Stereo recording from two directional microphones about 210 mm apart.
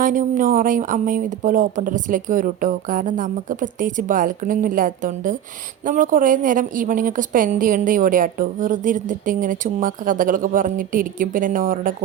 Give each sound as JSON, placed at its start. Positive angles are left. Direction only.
{"t": 0.0, "sound": "a woman's voice", "side_deg": -40}